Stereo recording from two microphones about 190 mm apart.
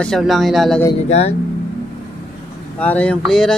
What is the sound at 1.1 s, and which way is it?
Speech, 35° left (ahead or behind).